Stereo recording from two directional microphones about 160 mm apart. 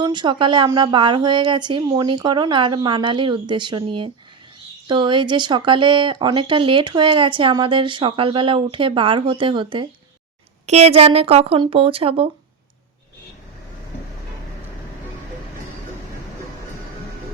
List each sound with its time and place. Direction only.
0.0 s speech: 30° right (ahead or behind)
10.7 s speech: 40° right (ahead or behind)